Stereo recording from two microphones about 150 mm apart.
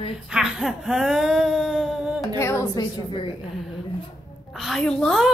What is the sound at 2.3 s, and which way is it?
Speech, 20° left (ahead or behind).